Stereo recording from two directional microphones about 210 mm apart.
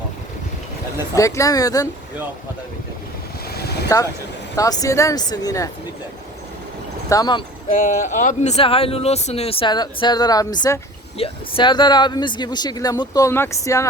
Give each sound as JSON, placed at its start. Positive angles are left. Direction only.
{"t": 1.1, "sound": "speech", "side_deg": 15}
{"t": 3.5, "sound": "vehicle", "side_deg": 50}
{"t": 4.5, "sound": "speech", "side_deg": 15}
{"t": 7.1, "sound": "speech", "side_deg": 20}
{"t": 7.7, "sound": "speech", "side_deg": 40}